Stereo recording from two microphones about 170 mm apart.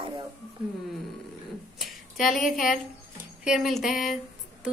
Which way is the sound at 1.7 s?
Centre (ahead or behind).